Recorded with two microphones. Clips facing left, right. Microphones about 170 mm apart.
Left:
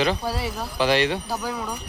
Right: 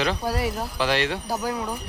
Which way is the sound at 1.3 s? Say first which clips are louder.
Right 2 dB; 10° right (ahead or behind).